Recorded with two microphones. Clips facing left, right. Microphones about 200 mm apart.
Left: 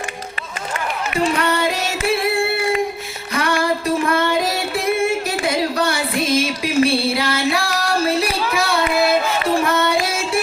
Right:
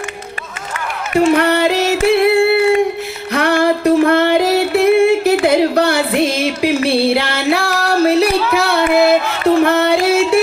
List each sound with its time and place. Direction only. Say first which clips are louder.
1.4 s singing: right 6 dB; 65° right (ahead or behind)
3.3 s music: right 6 dB; 60° right (ahead or behind)